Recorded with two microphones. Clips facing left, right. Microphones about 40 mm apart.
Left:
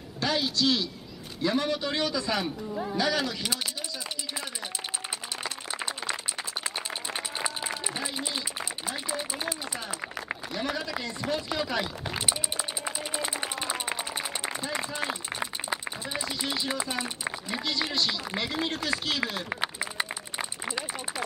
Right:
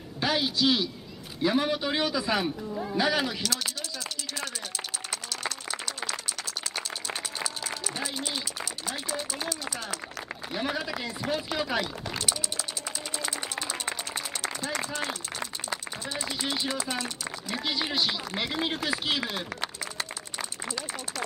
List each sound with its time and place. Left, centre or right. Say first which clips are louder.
0.2 s speech: right 1 dB; centre
2.7 s speech: even; centre
3.0 s speech: right 2 dB; centre
5.4 s a sound: even; centre
6.6 s applause: left 1 dB; centre
8.5 s run: even; centre
10.5 s speech: right 2 dB; centre
12.2 s run: left 2 dB; left
15.3 s a sound: left 2 dB; left
16.6 s speech: even; centre
17.6 s speech: right 1 dB; centre
19.6 s run: left 3 dB; centre